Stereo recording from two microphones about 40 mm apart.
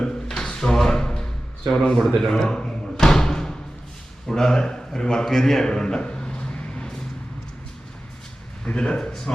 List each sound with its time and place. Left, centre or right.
0.0 s a sound: centre
1.7 s speech: centre
2.0 s speech: centre
2.2 s a sound: centre
4.3 s a man's voice: centre
8.6 s speech: left